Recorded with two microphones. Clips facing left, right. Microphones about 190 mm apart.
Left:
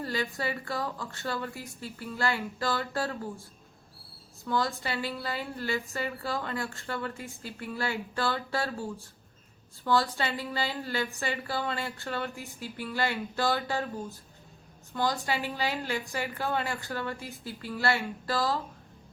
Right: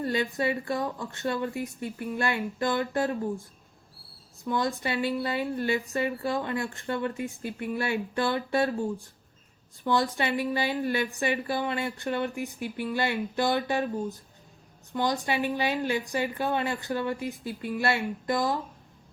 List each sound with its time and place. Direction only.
0.0 s a woman's voice: 20° right (ahead or behind)
4.4 s a woman's voice: 20° right (ahead or behind)
14.9 s a woman's voice: 20° right (ahead or behind)